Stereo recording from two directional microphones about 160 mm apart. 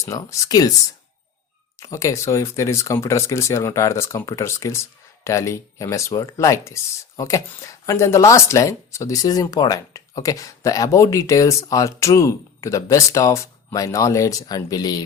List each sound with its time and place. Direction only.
0.0 s speech: 20° left (ahead or behind)
1.8 s speech: 20° left (ahead or behind)